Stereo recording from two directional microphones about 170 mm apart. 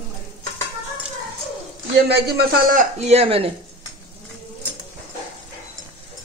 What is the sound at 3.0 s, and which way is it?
Speech, 35° right (ahead or behind).